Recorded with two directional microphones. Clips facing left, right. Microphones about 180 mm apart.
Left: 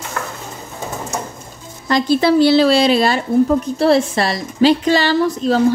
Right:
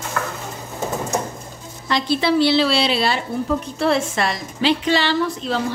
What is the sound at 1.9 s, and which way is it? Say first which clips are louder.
A woman's voice: left 5 dB; 45° left (ahead or behind).